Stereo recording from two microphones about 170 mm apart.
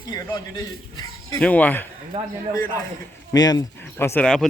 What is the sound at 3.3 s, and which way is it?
Speech, 20° left (ahead or behind).